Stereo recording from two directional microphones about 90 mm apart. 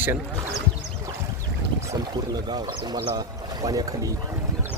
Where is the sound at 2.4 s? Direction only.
50° right (ahead or behind).